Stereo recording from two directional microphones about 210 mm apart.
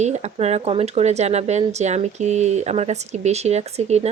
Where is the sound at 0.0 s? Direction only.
30° right (ahead or behind).